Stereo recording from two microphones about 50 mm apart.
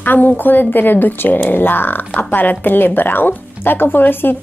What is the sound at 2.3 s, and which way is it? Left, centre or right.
A woman's voice, left.